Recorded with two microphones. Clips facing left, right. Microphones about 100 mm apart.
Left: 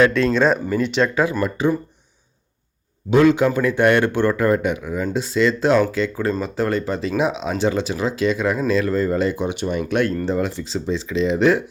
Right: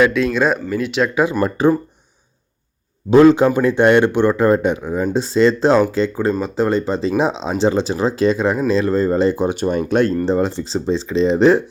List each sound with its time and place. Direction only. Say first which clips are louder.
0.0 s speech: right 1 dB; 5° right (ahead or behind)
1.1 s speech: right 2 dB; 20° right (ahead or behind)
1.4 s speech: right 5 dB; 45° right (ahead or behind)
3.1 s speech: right 5 dB; 35° right (ahead or behind)